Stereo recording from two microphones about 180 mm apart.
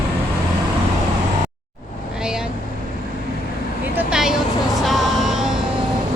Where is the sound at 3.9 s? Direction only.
5° right (ahead or behind).